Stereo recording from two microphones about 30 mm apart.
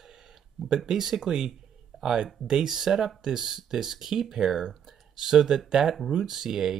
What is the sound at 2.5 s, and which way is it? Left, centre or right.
Speech, centre.